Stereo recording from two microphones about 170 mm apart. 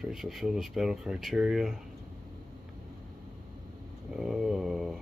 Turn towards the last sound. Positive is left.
turn(degrees=0)  # may be behind; listen again after turning